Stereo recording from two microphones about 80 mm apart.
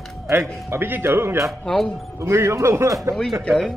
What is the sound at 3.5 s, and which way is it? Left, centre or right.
Speech, centre.